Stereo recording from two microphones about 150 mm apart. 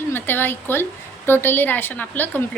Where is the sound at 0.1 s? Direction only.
15° left (ahead or behind).